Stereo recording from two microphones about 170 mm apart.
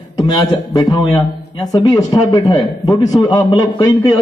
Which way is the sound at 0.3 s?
25° left (ahead or behind).